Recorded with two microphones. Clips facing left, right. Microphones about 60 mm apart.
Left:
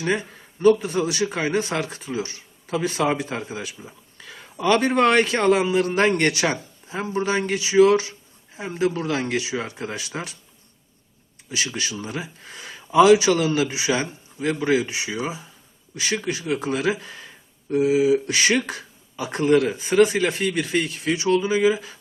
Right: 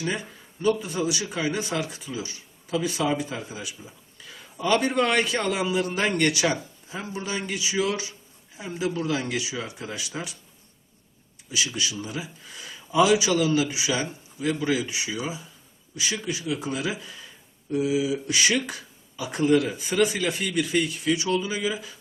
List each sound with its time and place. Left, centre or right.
0.0 s a man's voice: left
11.5 s speech: left
16.0 s speech: left